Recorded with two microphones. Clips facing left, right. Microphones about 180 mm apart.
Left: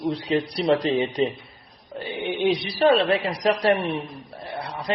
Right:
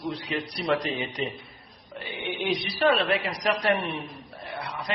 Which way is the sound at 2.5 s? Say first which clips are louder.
Left 3 dB; 30° left (ahead or behind).